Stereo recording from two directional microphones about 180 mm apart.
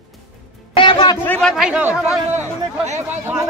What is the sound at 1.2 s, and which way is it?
Speech, 10° left (ahead or behind).